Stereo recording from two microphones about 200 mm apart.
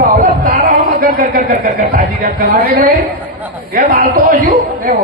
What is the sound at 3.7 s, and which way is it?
A man's voice, 45° right (ahead or behind).